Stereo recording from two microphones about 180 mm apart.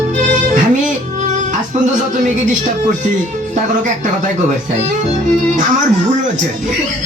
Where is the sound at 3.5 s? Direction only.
45° right (ahead or behind).